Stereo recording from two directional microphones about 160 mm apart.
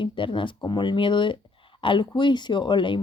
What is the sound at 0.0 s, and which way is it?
Speech, 30° left (ahead or behind).